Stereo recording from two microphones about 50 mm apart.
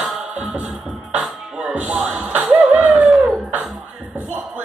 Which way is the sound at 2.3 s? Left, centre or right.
Right.